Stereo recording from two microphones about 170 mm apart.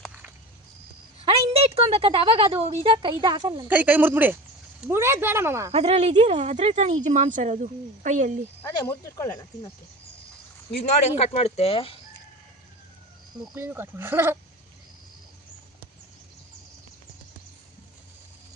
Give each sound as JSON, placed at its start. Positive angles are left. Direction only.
{"t": 1.2, "sound": "a woman's voice", "side_deg": -35}
{"t": 3.7, "sound": "speech", "side_deg": -10}
{"t": 5.7, "sound": "speech", "side_deg": -40}
{"t": 8.9, "sound": "speech", "side_deg": 20}
{"t": 10.8, "sound": "speech", "side_deg": 40}
{"t": 13.6, "sound": "speech", "side_deg": -15}